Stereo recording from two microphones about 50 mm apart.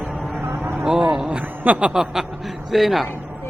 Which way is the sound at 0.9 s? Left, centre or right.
Centre.